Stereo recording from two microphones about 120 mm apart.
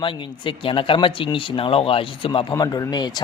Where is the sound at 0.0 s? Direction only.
45° left (ahead or behind).